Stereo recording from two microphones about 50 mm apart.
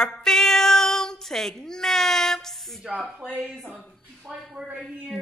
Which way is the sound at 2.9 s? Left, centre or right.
Centre.